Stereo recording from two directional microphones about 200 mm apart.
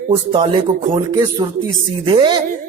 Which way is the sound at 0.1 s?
25° right (ahead or behind).